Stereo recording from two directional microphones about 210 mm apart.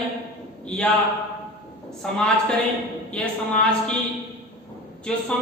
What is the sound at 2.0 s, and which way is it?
A woman's voice, 5° left (ahead or behind).